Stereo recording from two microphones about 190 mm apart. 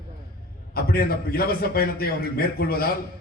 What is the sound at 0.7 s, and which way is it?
A man's voice, 50° left (ahead or behind).